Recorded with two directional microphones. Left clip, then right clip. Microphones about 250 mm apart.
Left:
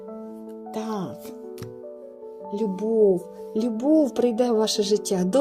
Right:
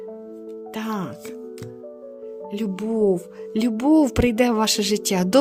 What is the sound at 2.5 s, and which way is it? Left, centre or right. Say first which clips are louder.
Speech: left 3 dB; right.